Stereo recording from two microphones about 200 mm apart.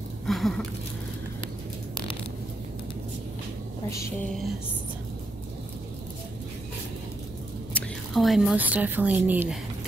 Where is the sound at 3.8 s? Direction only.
15° left (ahead or behind).